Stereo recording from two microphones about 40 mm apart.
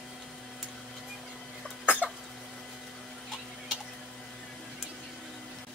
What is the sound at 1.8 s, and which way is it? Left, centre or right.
Cough, left.